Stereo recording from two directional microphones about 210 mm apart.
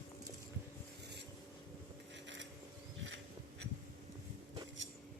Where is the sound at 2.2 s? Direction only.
60° right (ahead or behind).